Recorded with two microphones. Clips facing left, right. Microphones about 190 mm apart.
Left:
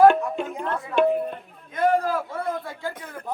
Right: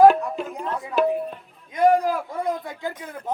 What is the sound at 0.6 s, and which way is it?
Tabla, 5° right (ahead or behind).